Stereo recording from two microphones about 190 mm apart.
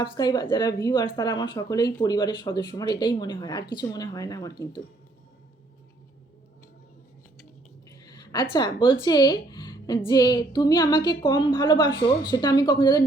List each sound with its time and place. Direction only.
0.0 s speech: 25° left (ahead or behind)
7.9 s a sound: 20° left (ahead or behind)
8.5 s speech: 20° left (ahead or behind)